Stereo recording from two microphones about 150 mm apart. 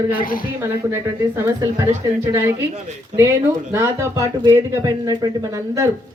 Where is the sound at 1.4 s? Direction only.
20° right (ahead or behind).